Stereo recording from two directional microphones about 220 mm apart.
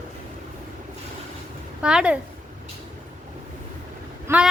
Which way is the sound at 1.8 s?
5° right (ahead or behind).